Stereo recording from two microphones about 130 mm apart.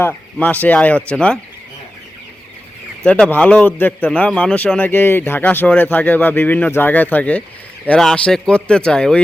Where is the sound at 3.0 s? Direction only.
5° left (ahead or behind).